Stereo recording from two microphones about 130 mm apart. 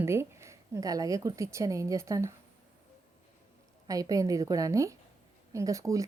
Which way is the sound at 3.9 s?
25° right (ahead or behind).